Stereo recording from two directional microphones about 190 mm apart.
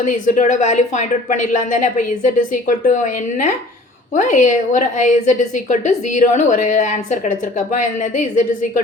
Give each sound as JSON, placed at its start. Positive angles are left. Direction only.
{"t": 0.1, "sound": "a woman's voice", "side_deg": 40}
{"t": 4.1, "sound": "a woman's voice", "side_deg": 40}